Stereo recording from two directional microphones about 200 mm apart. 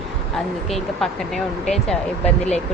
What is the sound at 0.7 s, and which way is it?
Speech, centre (ahead or behind).